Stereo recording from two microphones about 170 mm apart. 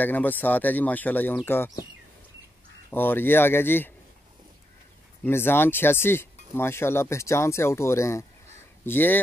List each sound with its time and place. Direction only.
0.0 s speech: 10° left (ahead or behind)
2.9 s speech: 10° left (ahead or behind)
5.2 s speech: 15° left (ahead or behind)